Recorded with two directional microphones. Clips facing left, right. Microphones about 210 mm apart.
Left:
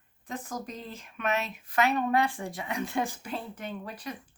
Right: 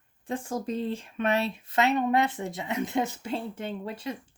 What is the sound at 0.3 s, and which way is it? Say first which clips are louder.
Speech: right 6 dB; 30° right (ahead or behind).